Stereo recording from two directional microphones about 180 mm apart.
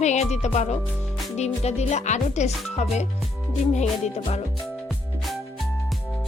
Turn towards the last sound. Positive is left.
turn(degrees=40)  # may be behind; listen again after turning